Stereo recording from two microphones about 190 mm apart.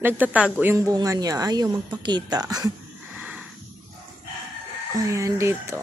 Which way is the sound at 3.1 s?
10° right (ahead or behind).